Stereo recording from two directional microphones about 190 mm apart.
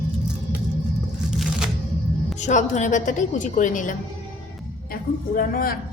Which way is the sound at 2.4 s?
40° left (ahead or behind).